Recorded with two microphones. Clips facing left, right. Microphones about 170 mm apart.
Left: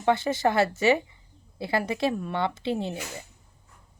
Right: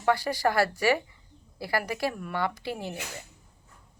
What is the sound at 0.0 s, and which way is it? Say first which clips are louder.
A woman's voice: left 2 dB; 25° left (ahead or behind).